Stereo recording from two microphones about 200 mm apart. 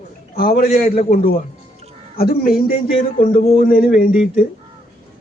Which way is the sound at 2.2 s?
50° left (ahead or behind).